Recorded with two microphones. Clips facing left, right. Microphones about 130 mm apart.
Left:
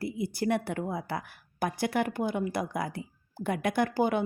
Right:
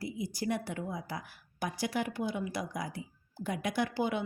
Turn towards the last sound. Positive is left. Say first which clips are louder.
# left 5 dB
turn(degrees=50)  # may be behind; listen again after turning